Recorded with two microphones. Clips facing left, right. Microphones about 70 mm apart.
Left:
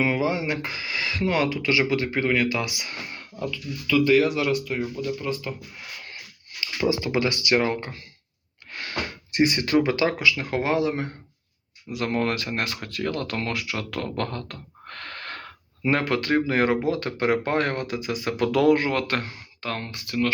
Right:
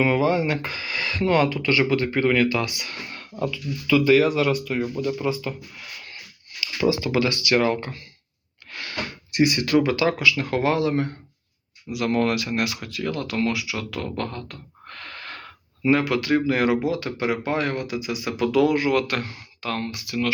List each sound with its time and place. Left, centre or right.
0.0 s speech: centre
3.3 s speech: centre
4.1 s speech: centre
5.3 s speech: centre
6.8 s speech: left
11.9 s speech: left